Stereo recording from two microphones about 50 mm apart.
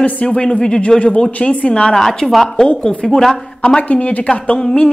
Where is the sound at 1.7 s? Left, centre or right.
Centre.